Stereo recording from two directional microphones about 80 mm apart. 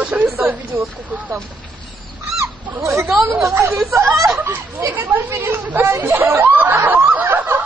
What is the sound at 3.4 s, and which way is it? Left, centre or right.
Speech, right.